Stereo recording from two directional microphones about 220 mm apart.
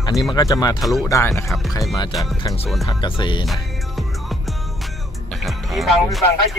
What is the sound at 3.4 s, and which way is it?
Music, centre (ahead or behind).